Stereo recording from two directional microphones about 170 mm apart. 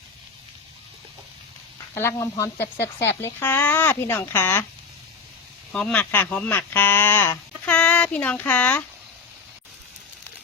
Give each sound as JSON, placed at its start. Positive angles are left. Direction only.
{"t": 2.0, "sound": "speech", "side_deg": 15}
{"t": 5.7, "sound": "speech", "side_deg": 5}